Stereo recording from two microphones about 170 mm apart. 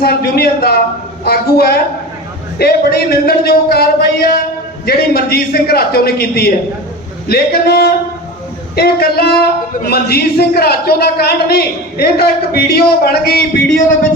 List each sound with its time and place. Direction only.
0.0 s a man's voice: 65° left (ahead or behind)